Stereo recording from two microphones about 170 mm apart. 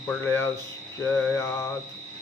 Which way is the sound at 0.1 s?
15° left (ahead or behind).